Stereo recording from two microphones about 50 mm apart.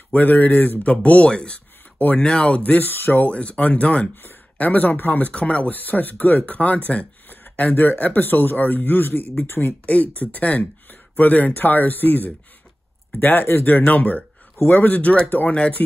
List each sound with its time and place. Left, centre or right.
0.1 s speech: left
3.3 s speech: left
4.1 s speech: left
4.6 s speech: left
9.8 s speech: left
14.6 s speech: left
14.9 s speech: left